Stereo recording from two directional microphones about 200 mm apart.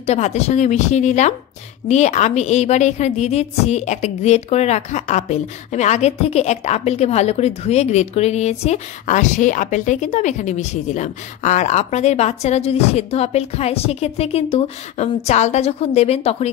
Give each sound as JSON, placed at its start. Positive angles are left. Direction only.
{"t": 0.0, "sound": "a woman's voice", "side_deg": 35}